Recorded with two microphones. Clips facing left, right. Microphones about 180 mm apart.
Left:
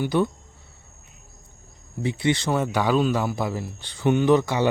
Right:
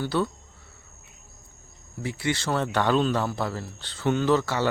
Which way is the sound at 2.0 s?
20° left (ahead or behind).